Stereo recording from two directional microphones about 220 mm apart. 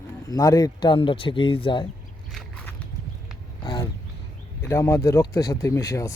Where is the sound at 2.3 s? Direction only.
5° left (ahead or behind).